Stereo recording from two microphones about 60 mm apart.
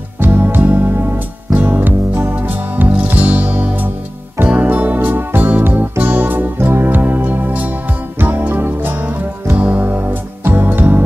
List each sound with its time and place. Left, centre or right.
0.2 s music: right